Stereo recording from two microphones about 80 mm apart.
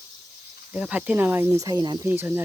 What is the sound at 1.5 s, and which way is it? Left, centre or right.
Speech, right.